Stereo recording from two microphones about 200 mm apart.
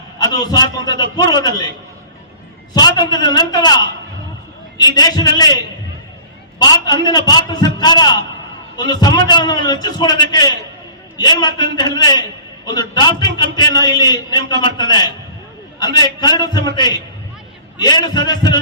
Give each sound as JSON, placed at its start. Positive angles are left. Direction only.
{"t": 0.2, "sound": "a man's voice", "side_deg": 20}
{"t": 2.7, "sound": "a man's voice", "side_deg": 20}
{"t": 4.8, "sound": "a man's voice", "side_deg": 20}
{"t": 6.6, "sound": "a man's voice", "side_deg": 20}